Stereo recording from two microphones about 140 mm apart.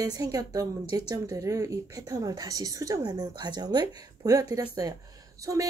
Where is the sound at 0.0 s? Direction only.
25° right (ahead or behind).